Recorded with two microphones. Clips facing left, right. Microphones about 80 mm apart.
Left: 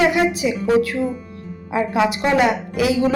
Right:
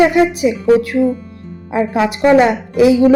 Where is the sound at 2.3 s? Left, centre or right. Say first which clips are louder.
Right 6 dB; right.